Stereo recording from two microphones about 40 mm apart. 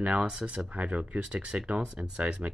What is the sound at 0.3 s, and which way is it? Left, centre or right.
Speech, right.